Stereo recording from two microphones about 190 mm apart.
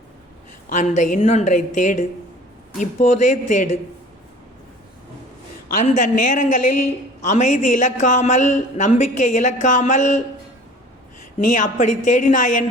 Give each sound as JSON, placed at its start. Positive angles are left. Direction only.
{"t": 0.7, "sound": "a man's voice", "side_deg": 40}
{"t": 5.7, "sound": "a man's voice", "side_deg": 40}
{"t": 11.3, "sound": "a woman's voice", "side_deg": 45}